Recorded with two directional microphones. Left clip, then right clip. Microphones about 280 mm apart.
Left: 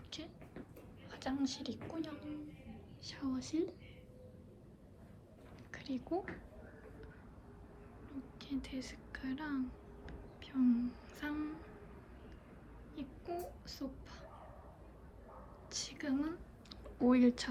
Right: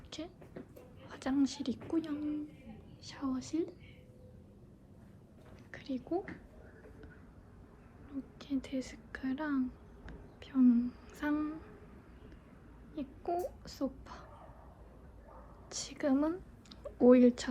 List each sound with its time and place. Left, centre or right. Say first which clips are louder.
0.1 s a woman's voice: right 4 dB; centre
3.0 s speech: right 3 dB; centre
5.7 s a sound: right 2 dB; centre
8.4 s a woman's voice: right 5 dB; centre
10.1 s humming: right 4 dB; centre
13.0 s a sound: right 8 dB; centre
15.7 s speech: right 6 dB; centre